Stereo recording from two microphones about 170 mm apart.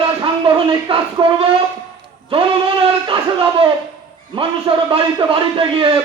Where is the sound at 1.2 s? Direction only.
30° right (ahead or behind).